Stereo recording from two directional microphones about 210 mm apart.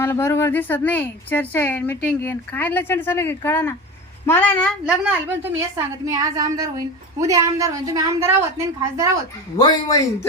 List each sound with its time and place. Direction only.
0.0 s speech: 10° left (ahead or behind)
5.3 s a woman's voice: 10° right (ahead or behind)
9.6 s speech: 20° left (ahead or behind)